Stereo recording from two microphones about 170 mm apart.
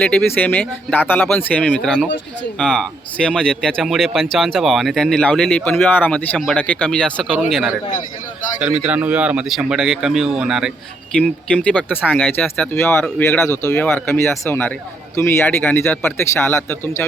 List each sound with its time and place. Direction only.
0.0 s speech: 5° left (ahead or behind)
7.3 s speech: 5° right (ahead or behind); by 17.1 s 15° left (ahead or behind)